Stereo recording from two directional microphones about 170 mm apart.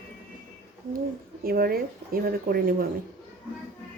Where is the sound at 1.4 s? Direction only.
60° right (ahead or behind).